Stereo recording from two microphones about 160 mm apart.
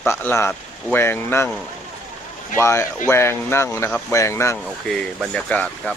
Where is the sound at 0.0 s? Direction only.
10° left (ahead or behind).